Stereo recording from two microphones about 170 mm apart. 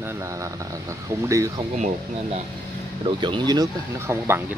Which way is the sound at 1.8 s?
40° right (ahead or behind).